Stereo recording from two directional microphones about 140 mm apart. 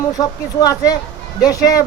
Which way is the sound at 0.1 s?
25° left (ahead or behind).